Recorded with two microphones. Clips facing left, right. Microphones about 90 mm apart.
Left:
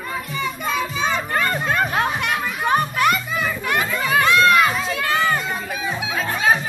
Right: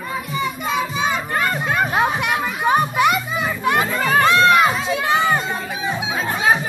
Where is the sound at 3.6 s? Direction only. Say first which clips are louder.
Right 6 dB; 25° right (ahead or behind).